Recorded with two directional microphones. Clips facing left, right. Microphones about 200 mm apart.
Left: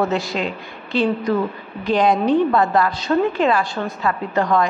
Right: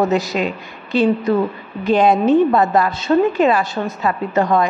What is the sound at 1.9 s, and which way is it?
A woman's voice, 25° right (ahead or behind).